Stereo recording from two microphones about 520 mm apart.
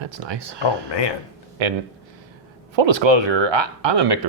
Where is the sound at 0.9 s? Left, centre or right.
Left.